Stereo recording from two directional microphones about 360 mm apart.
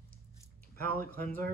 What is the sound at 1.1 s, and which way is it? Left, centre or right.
Speech, centre.